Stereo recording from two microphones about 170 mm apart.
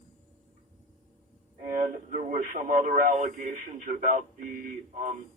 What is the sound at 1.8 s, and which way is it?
Speech, 50° right (ahead or behind).